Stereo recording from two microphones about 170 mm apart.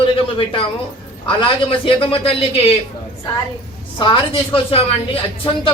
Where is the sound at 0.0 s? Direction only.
30° left (ahead or behind).